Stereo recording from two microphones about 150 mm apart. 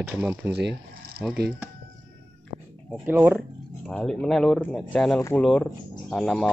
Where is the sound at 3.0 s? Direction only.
10° right (ahead or behind).